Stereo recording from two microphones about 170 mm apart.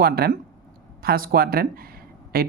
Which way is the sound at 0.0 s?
60° right (ahead or behind).